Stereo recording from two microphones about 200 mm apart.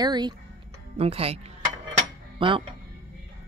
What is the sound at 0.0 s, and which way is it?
Speech, 20° right (ahead or behind).